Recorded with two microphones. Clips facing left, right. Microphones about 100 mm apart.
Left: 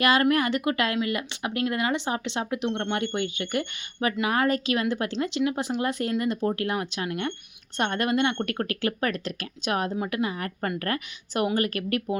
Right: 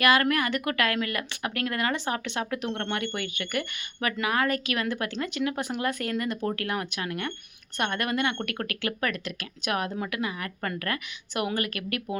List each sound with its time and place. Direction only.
0.0 s a woman's voice: 30° left (ahead or behind)